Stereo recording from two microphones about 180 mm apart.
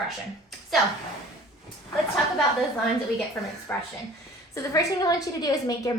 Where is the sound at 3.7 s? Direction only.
10° left (ahead or behind).